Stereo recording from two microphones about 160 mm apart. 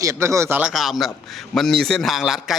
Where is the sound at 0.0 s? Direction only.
20° right (ahead or behind).